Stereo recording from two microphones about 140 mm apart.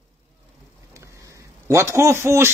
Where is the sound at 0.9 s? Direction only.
20° right (ahead or behind).